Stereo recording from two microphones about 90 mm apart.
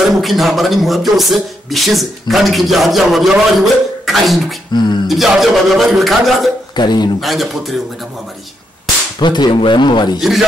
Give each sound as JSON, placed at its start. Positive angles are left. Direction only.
{"t": 0.0, "sound": "speech", "side_deg": 0}
{"t": 6.7, "sound": "a man's voice", "side_deg": 50}
{"t": 7.2, "sound": "speech", "side_deg": 0}
{"t": 9.2, "sound": "speech", "side_deg": 55}